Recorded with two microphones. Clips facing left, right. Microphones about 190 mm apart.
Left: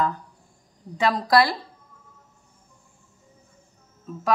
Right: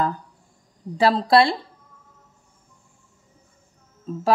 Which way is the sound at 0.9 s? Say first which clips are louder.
Right 3 dB; 30° right (ahead or behind).